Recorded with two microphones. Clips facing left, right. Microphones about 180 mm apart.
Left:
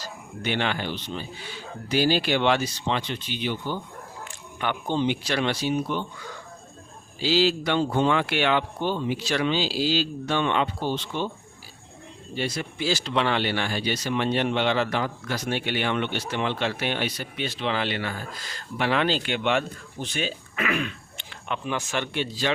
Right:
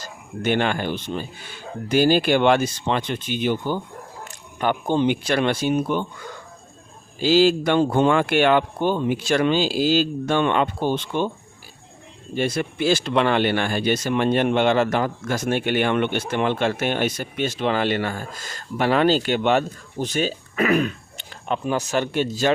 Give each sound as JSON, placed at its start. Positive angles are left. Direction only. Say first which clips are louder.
{"t": 0.0, "sound": "speech", "louder": "right 6 dB", "side_deg": -50}
{"t": 4.2, "sound": "a sound", "louder": "right 6 dB", "side_deg": -40}
{"t": 4.9, "sound": "speech", "louder": "right 3 dB", "side_deg": -50}
{"t": 12.3, "sound": "speech", "louder": "right 6 dB", "side_deg": -50}